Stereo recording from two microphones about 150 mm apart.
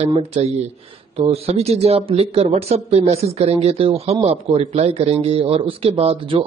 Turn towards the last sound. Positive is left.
turn(degrees=-40)  # may be behind; listen again after turning